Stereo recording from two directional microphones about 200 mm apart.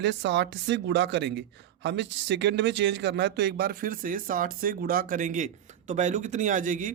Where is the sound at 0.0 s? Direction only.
60° right (ahead or behind).